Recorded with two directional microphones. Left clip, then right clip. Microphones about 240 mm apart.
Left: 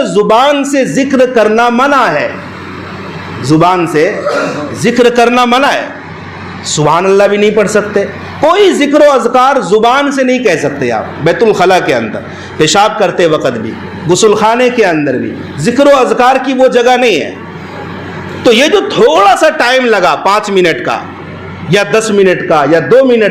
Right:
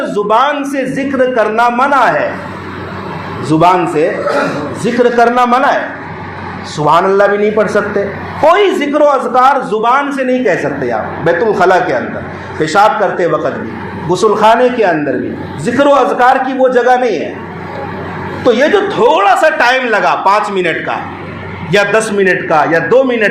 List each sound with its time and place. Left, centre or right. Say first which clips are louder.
0.0 s a man's voice: left 4 dB; left
3.5 s a man's voice: left 1 dB; left
18.6 s a man's voice: left 2 dB; left